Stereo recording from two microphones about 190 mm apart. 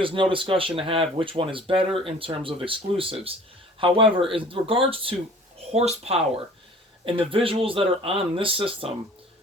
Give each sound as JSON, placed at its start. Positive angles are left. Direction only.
{"t": 0.0, "sound": "speech", "side_deg": -25}